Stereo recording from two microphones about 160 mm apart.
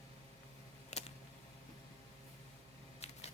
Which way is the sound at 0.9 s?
45° left (ahead or behind).